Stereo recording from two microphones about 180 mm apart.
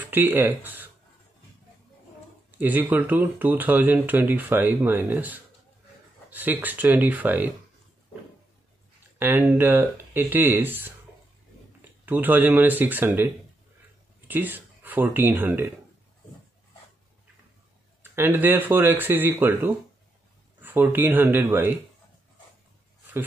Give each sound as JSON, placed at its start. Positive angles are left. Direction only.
{"t": 0.0, "sound": "speech", "side_deg": -10}
{"t": 2.6, "sound": "speech", "side_deg": -10}
{"t": 9.2, "sound": "speech", "side_deg": -10}
{"t": 18.1, "sound": "speech", "side_deg": -10}